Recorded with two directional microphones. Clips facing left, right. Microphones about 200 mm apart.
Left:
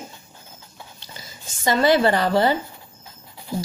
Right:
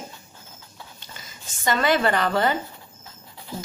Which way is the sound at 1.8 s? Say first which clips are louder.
Left 4 dB; 35° left (ahead or behind).